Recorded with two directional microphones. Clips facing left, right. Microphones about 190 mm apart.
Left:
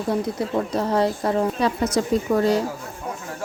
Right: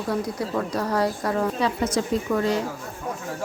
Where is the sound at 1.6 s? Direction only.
40° left (ahead or behind).